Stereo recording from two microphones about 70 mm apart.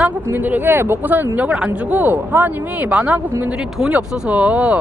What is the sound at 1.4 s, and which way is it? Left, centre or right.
Speech, centre.